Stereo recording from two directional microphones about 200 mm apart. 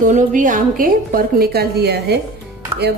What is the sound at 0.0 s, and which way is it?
A woman's voice, 40° right (ahead or behind).